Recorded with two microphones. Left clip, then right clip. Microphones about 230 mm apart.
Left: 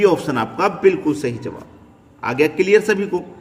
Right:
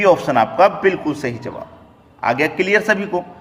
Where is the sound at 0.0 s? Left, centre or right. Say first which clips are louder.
Right 3 dB; centre.